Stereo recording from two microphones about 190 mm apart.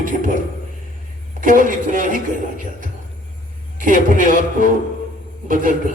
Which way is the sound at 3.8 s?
45° right (ahead or behind).